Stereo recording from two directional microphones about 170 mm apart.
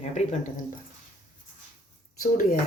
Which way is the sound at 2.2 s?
55° left (ahead or behind).